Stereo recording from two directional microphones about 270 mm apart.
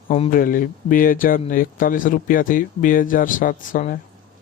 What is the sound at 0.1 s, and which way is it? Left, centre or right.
A man's voice, left.